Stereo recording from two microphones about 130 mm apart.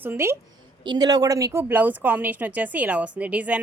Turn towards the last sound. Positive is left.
turn(degrees=-10)  # may be behind; listen again after turning